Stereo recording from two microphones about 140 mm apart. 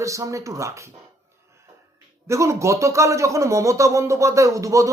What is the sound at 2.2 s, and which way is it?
Speech, 20° right (ahead or behind).